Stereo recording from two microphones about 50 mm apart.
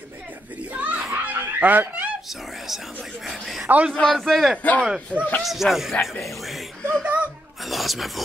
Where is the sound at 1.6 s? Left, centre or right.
Right.